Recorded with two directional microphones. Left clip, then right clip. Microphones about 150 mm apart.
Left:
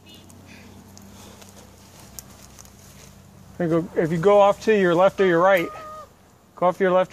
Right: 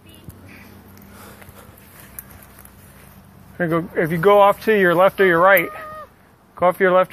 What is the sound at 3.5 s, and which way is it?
Speech, 5° left (ahead or behind).